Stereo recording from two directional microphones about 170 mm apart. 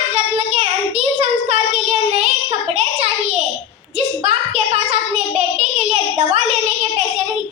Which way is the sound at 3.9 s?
40° right (ahead or behind).